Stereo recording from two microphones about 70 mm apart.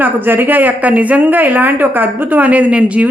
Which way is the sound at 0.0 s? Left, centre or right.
Right.